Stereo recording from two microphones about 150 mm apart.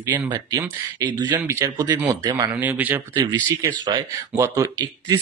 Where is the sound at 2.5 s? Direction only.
10° right (ahead or behind).